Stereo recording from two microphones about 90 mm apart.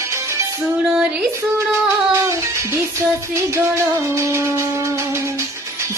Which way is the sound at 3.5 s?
35° right (ahead or behind).